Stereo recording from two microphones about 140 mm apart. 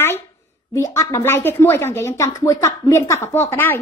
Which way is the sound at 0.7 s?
20° left (ahead or behind).